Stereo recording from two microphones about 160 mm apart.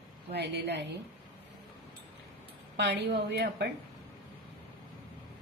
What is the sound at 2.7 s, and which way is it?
Speech, 90° right.